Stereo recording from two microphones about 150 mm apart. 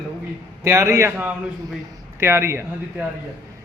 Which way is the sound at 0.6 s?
20° right (ahead or behind).